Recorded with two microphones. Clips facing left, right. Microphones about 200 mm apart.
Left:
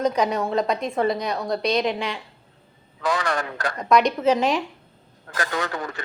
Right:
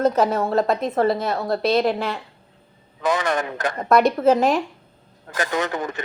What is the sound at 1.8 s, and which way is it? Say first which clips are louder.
Speech: right 3 dB; 50° right (ahead or behind).